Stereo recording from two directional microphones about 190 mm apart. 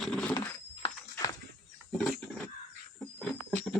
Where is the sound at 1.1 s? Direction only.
20° left (ahead or behind).